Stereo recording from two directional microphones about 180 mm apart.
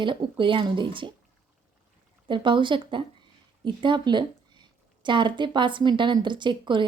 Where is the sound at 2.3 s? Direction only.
25° right (ahead or behind).